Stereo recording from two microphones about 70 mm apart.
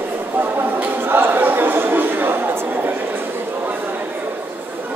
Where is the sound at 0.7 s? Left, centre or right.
Right.